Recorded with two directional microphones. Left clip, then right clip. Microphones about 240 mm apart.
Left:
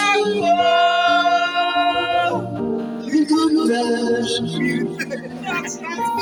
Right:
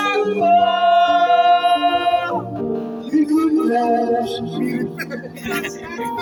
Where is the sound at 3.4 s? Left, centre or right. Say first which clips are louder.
Right 1 dB; left.